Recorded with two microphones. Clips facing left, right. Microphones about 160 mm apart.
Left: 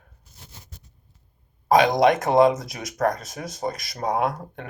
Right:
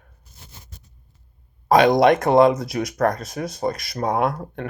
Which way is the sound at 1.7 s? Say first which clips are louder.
Right 3 dB; 55° right (ahead or behind).